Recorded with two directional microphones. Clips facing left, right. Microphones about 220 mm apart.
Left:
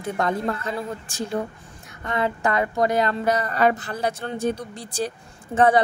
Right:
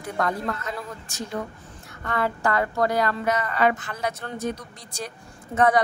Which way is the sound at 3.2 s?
35° left (ahead or behind).